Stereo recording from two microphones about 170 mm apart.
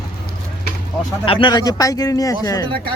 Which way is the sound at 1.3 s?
30° left (ahead or behind).